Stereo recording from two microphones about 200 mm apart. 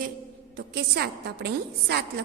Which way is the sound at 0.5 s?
55° right (ahead or behind).